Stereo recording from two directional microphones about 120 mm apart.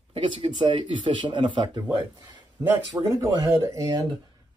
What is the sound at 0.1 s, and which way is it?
Speech, 45° right (ahead or behind).